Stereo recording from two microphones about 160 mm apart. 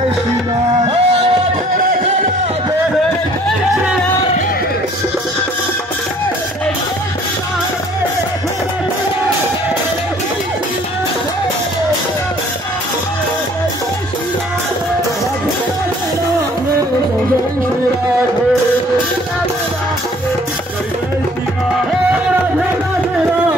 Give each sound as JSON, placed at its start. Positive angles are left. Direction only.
{"t": 0.8, "sound": "music", "side_deg": -40}